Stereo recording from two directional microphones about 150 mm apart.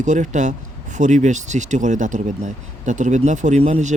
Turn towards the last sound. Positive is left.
turn(degrees=-50)  # may be behind; listen again after turning